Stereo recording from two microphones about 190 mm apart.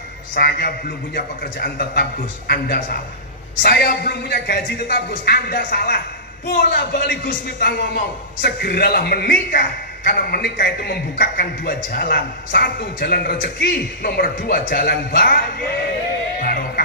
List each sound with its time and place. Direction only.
0.3 s a man's voice: 55° left (ahead or behind)
16.4 s music: 55° left (ahead or behind)